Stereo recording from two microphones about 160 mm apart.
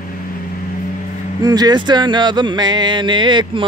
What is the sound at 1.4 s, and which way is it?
Speech, 25° right (ahead or behind).